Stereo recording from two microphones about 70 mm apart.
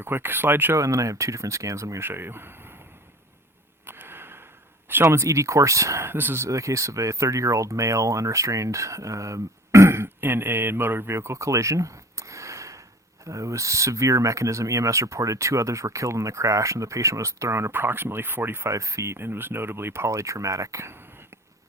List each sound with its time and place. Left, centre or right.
0.0 s speech: right
0.8 s speech: right
2.0 s speech: right
3.8 s a sound: right
5.1 s speech: right
6.1 s speech: right
18.7 s speech: right